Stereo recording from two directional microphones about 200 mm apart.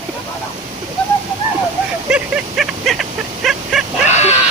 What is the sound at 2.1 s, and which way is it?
Dog, 5° right (ahead or behind).